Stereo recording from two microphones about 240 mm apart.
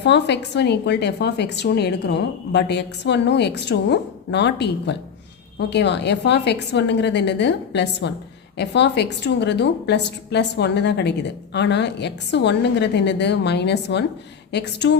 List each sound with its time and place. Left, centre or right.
0.0 s speech: left